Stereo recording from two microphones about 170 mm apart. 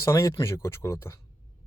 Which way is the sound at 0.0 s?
20° left (ahead or behind).